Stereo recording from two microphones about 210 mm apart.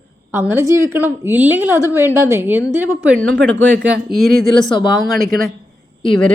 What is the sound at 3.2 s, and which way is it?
Speech, 60° right (ahead or behind).